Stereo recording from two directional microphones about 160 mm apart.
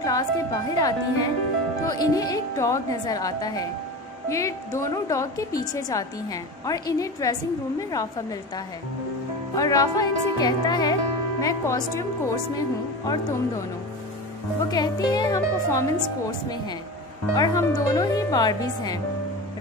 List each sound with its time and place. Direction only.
0.0 s a woman's voice: 25° left (ahead or behind)
9.6 s a woman's voice: 20° left (ahead or behind)
14.7 s a woman's voice: 25° left (ahead or behind)
17.4 s a woman's voice: 20° left (ahead or behind)